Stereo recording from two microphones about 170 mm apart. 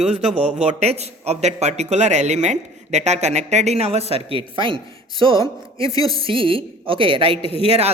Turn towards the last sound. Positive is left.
turn(degrees=-35)  # may be behind; listen again after turning